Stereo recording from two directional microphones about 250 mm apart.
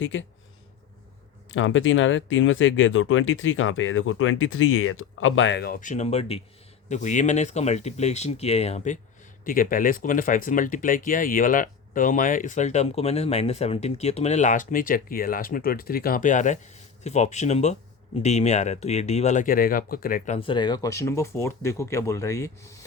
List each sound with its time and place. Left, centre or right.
0.0 s speech: left
1.5 s speech: left; by 22.5 s centre